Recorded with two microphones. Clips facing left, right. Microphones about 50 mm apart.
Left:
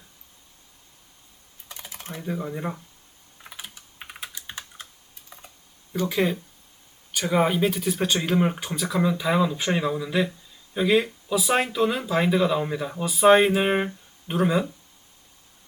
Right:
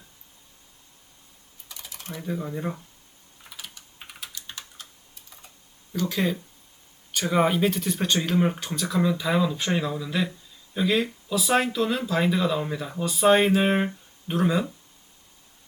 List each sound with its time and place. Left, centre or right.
1.6 s typing: left
2.2 s speech: centre
3.4 s typing: left
5.9 s speech: centre
7.1 s speech: centre